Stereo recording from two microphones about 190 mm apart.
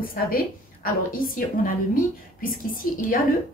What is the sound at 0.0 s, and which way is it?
A woman's voice, 50° left (ahead or behind).